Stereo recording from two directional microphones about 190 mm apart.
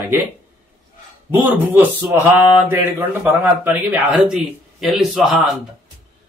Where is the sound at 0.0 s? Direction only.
10° right (ahead or behind).